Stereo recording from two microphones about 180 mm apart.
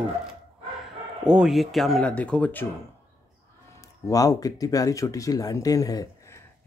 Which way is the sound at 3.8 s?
20° left (ahead or behind).